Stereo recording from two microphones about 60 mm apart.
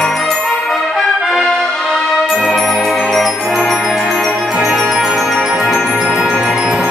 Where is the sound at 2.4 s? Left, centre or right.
Centre.